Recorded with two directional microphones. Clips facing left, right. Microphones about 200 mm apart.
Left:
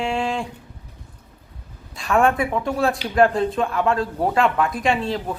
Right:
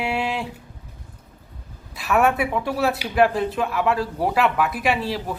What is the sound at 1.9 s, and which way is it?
Speech, 5° right (ahead or behind).